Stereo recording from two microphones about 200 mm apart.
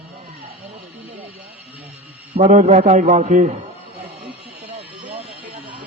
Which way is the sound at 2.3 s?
35° right (ahead or behind).